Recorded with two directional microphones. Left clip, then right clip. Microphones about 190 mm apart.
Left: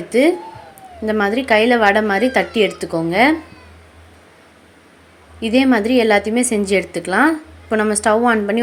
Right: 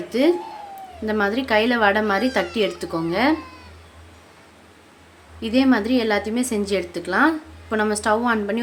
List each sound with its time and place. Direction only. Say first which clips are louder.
0.1 s a woman's voice: left 5 dB; 15° left (ahead or behind)
5.4 s a woman's voice: left 4 dB; 20° left (ahead or behind)